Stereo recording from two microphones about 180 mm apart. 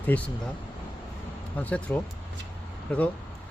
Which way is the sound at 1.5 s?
10° left (ahead or behind).